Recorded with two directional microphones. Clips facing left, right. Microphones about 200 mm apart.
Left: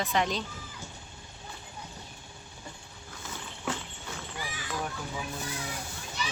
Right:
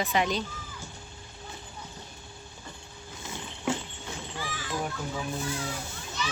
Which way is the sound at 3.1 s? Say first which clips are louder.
Right 2 dB; 20° right (ahead or behind).